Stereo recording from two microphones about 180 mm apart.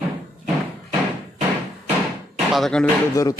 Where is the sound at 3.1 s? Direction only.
20° left (ahead or behind).